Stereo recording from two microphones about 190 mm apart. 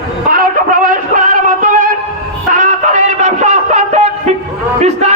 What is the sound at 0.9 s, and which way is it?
Music, 45° right (ahead or behind).